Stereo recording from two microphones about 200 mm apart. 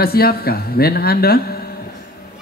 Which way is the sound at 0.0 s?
50° left (ahead or behind).